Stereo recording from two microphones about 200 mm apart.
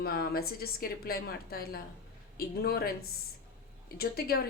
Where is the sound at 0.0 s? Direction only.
50° left (ahead or behind).